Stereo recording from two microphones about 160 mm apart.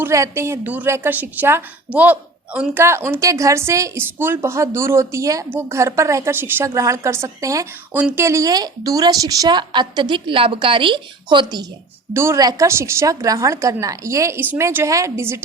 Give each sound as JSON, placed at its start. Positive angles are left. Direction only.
{"t": 0.0, "sound": "a woman's voice", "side_deg": -15}
{"t": 12.1, "sound": "a woman's voice", "side_deg": -15}